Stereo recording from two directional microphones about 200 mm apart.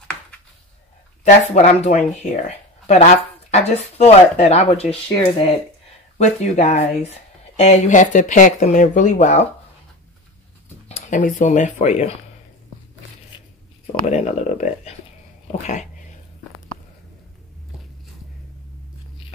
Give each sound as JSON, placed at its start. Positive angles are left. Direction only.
{"t": 1.2, "sound": "speech", "side_deg": 35}
{"t": 6.1, "sound": "speech", "side_deg": 35}
{"t": 10.9, "sound": "speech", "side_deg": 35}
{"t": 13.3, "sound": "a sound", "side_deg": 25}
{"t": 14.0, "sound": "speech", "side_deg": 35}
{"t": 15.6, "sound": "cat", "side_deg": 35}